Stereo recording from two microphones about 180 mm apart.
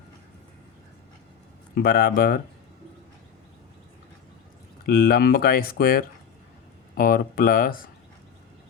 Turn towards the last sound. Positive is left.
turn(degrees=50)  # may be behind; listen again after turning